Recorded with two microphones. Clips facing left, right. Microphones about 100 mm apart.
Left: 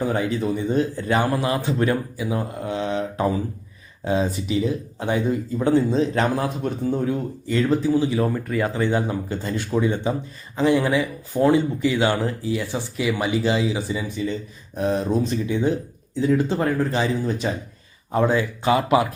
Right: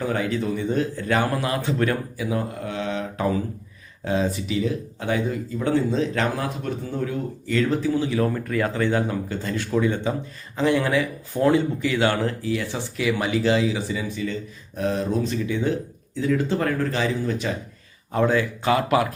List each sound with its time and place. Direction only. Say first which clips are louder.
0.0 s a man's voice: left 2 dB; 20° left (ahead or behind)
2.6 s a man's voice: left 3 dB; 25° left (ahead or behind)